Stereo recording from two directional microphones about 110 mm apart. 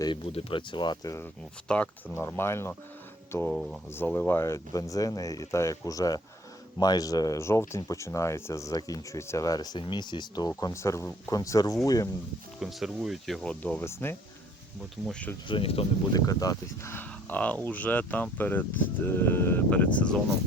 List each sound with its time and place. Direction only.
0.0 s speech: 50° left (ahead or behind)
1.6 s speech: 10° left (ahead or behind)
2.1 s speech: 20° left (ahead or behind)
3.5 s speech: centre (ahead or behind)
3.9 s speech: 15° left (ahead or behind); by 10.5 s 40° left (ahead or behind)
10.6 s speech: 30° left (ahead or behind)
12.5 s speech: 5° right (ahead or behind); by 14.2 s 20° left (ahead or behind)
15.0 s speech: 10° left (ahead or behind)
15.4 s speech: 55° left (ahead or behind)
16.1 s speech: 35° left (ahead or behind)
16.9 s speech: 15° left (ahead or behind)